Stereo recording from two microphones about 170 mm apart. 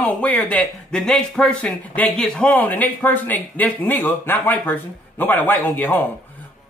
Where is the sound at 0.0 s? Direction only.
10° left (ahead or behind).